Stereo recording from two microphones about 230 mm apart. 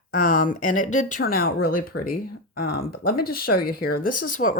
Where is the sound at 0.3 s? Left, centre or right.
Left.